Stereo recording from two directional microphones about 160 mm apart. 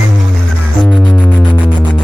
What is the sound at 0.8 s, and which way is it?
Music, 5° left (ahead or behind).